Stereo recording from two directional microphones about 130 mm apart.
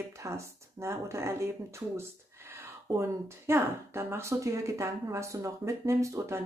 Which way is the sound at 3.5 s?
20° right (ahead or behind).